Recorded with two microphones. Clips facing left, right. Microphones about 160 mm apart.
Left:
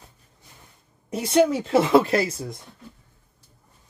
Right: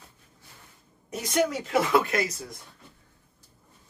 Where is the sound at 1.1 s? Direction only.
30° left (ahead or behind).